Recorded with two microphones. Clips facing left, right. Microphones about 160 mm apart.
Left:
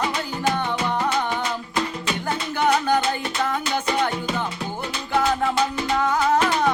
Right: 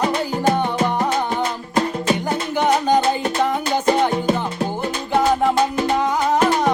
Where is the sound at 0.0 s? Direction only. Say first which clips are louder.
Right 5 dB; 45° right (ahead or behind).